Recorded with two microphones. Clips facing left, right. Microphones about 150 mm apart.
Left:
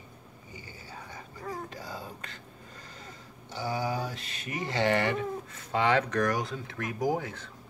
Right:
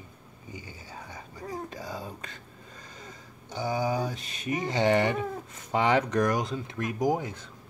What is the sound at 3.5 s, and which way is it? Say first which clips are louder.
Speech: right 3 dB; 15° right (ahead or behind).